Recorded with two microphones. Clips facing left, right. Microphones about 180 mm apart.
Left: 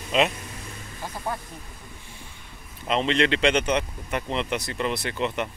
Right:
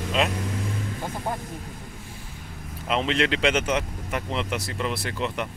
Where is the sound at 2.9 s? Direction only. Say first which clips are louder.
Left 1 dB; 5° right (ahead or behind).